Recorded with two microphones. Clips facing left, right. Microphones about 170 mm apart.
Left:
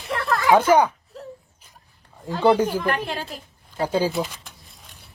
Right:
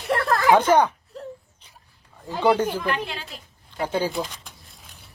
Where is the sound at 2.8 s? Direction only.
45° left (ahead or behind).